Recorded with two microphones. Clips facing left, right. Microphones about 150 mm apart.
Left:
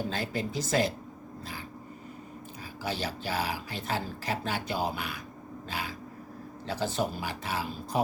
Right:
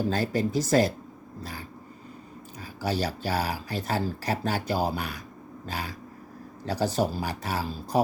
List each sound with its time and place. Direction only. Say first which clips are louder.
0.1 s speech: right 7 dB; 40° right (ahead or behind)
2.8 s speech: right 5 dB; 40° right (ahead or behind)